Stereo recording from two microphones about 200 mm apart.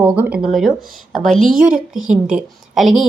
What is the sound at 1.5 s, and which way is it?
Speech, 40° right (ahead or behind).